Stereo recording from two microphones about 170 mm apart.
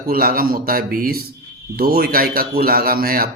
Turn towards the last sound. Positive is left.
turn(degrees=-60)  # may be behind; listen again after turning